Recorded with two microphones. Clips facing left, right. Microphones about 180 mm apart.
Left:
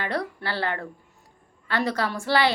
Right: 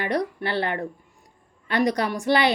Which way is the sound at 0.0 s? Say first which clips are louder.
Right 4 dB; 20° right (ahead or behind).